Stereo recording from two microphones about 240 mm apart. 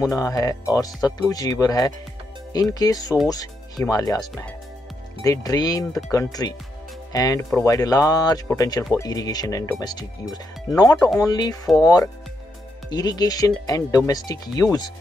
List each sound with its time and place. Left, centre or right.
0.1 s speech: centre
5.2 s speech: centre